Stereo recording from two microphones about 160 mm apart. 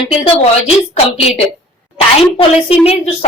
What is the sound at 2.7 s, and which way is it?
Speech, 40° left (ahead or behind).